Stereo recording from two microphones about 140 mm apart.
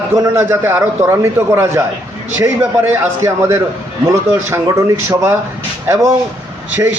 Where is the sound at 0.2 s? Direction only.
15° right (ahead or behind).